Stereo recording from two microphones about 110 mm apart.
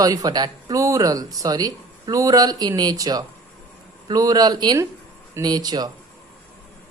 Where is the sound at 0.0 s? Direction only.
35° right (ahead or behind).